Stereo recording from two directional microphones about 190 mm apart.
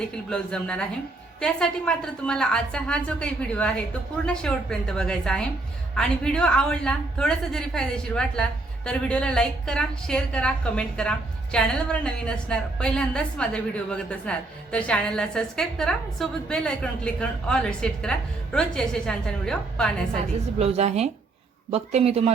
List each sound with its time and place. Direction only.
0.3 s a woman's voice: 5° left (ahead or behind)
20.6 s speech: 35° right (ahead or behind)